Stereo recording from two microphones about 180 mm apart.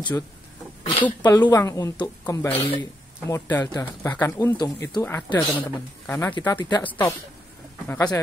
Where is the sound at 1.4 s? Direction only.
15° left (ahead or behind).